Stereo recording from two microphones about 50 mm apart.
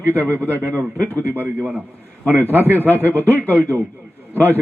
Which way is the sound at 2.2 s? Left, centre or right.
Right.